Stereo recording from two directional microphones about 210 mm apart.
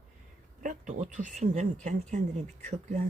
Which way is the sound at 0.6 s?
35° right (ahead or behind).